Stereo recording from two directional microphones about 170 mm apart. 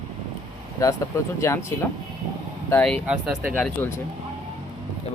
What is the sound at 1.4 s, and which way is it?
Speech, 15° left (ahead or behind).